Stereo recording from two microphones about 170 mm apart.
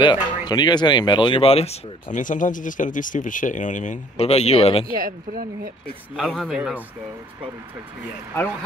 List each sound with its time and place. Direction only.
0.0 s speech: 25° left (ahead or behind)
4.9 s speech: 55° right (ahead or behind)
6.1 s speech: centre (ahead or behind)